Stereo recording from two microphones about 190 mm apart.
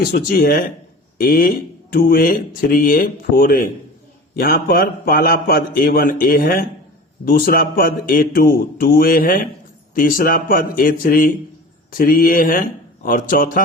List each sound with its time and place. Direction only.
0.0 s speech: 55° left (ahead or behind)